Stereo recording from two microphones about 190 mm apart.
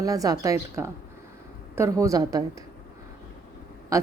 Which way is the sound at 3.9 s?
15° right (ahead or behind).